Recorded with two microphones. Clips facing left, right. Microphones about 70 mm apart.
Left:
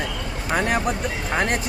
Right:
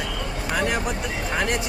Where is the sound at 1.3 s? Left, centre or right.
Left.